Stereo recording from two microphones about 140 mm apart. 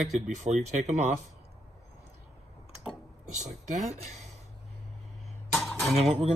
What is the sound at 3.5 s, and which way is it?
Speech, 50° right (ahead or behind).